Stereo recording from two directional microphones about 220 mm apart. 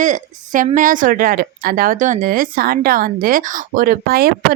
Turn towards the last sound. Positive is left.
turn(degrees=-45)  # may be behind; listen again after turning